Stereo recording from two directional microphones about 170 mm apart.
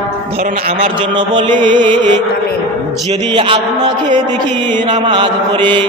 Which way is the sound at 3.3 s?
30° right (ahead or behind).